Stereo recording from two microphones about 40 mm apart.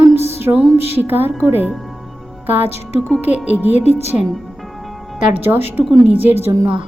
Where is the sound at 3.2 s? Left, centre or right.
Right.